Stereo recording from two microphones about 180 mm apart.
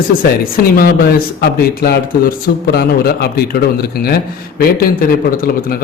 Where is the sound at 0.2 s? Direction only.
55° left (ahead or behind).